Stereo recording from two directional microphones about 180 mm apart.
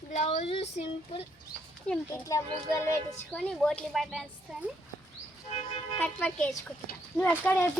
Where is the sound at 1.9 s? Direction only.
15° left (ahead or behind).